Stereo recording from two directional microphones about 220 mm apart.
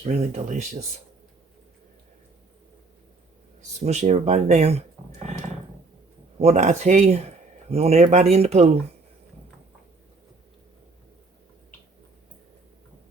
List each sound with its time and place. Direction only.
0.0 s speech: 35° right (ahead or behind)
3.8 s speech: 30° right (ahead or behind)
6.4 s speech: 30° right (ahead or behind)